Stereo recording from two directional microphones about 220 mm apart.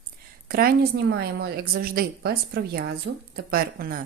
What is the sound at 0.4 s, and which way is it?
A woman's voice, 45° right (ahead or behind).